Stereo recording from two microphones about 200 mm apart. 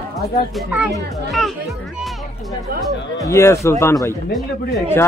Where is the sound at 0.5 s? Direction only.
5° right (ahead or behind).